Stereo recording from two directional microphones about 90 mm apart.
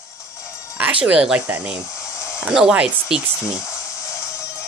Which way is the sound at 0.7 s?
15° right (ahead or behind).